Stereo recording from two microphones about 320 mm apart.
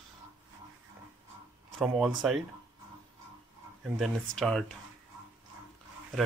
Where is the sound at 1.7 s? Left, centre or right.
Centre.